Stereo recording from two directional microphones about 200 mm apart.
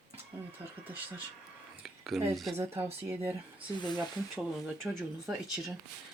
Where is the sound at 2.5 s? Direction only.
10° right (ahead or behind).